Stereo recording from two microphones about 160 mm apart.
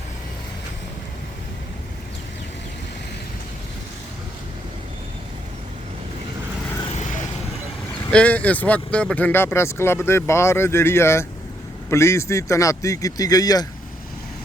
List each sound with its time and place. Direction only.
8.1 s speech: 10° left (ahead or behind)